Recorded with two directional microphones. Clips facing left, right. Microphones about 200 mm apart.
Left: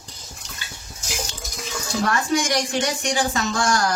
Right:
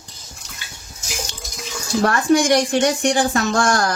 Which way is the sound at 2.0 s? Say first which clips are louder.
Right 7 dB; 55° right (ahead or behind).